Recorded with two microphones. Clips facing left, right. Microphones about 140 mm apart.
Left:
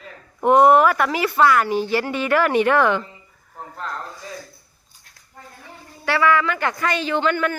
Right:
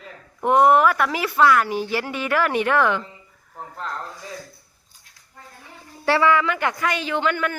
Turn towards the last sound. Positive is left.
turn(degrees=-5)  # may be behind; listen again after turning